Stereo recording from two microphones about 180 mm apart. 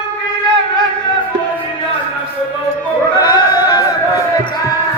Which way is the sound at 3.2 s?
25° left (ahead or behind).